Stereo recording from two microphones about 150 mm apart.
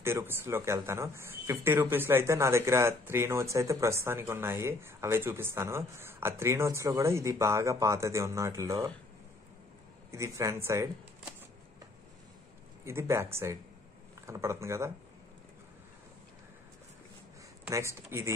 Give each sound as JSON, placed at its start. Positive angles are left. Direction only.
{"t": 0.0, "sound": "speech", "side_deg": -15}
{"t": 10.1, "sound": "speech", "side_deg": -20}
{"t": 12.8, "sound": "speech", "side_deg": -20}
{"t": 17.6, "sound": "speech", "side_deg": -20}